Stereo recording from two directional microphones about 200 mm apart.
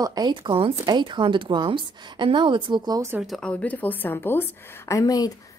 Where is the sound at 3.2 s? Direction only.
Centre (ahead or behind); by 5.3 s 15° left (ahead or behind).